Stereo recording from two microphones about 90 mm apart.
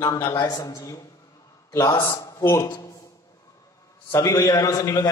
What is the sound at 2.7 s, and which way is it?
Speech, 50° left (ahead or behind).